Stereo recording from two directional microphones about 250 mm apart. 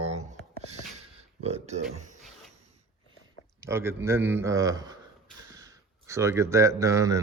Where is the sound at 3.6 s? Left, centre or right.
Centre.